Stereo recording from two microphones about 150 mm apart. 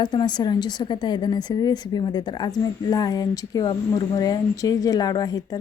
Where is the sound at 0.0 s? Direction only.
30° left (ahead or behind).